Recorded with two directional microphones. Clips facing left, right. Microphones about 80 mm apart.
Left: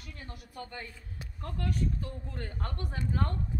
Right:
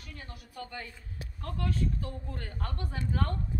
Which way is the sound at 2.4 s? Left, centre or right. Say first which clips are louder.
Even; left.